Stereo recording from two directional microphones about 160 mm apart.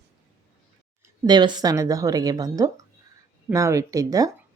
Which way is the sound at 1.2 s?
25° right (ahead or behind).